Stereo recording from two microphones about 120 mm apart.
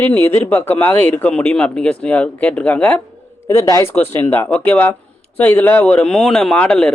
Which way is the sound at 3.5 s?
25° left (ahead or behind).